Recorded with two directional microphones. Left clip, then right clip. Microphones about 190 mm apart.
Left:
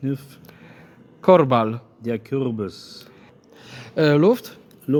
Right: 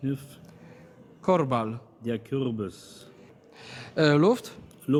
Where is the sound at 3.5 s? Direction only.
15° left (ahead or behind).